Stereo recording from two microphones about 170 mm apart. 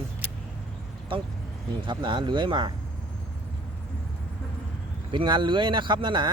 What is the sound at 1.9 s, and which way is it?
Speech, 25° right (ahead or behind).